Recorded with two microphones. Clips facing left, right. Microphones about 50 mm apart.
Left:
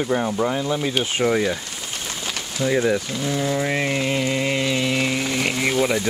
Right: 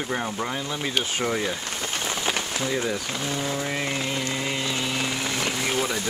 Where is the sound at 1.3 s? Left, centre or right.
Centre.